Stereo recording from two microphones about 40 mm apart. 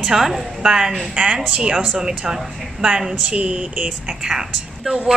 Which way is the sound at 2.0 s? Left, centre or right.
Centre.